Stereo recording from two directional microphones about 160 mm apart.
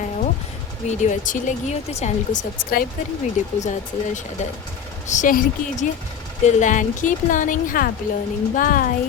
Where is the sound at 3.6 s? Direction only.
50° left (ahead or behind).